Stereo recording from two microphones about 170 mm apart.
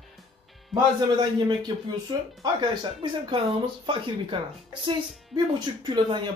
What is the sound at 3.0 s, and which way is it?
Speech, 30° right (ahead or behind).